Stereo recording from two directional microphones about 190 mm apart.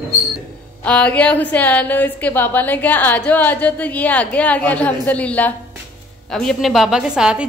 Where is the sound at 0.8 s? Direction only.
5° left (ahead or behind).